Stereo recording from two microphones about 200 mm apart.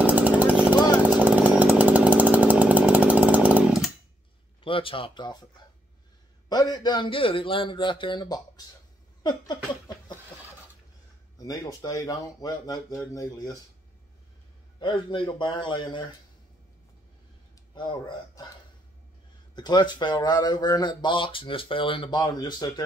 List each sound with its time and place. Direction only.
0.0 s chainsaw: 10° right (ahead or behind)
4.6 s speech: 25° left (ahead or behind)
6.5 s speech: 20° left (ahead or behind)
9.2 s a sound: 20° left (ahead or behind)
11.3 s speech: 20° left (ahead or behind)
14.8 s speech: 25° left (ahead or behind)
17.7 s speech: 25° left (ahead or behind)
19.5 s speech: 20° left (ahead or behind)